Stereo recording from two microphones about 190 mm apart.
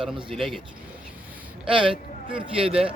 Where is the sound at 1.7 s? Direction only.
25° right (ahead or behind).